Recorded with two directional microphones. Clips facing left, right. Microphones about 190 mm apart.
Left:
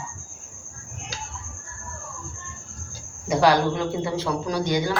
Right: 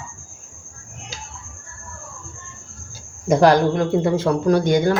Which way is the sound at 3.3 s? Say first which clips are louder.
Right 5 dB; 50° right (ahead or behind).